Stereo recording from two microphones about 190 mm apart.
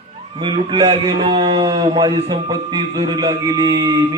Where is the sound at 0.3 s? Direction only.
25° right (ahead or behind).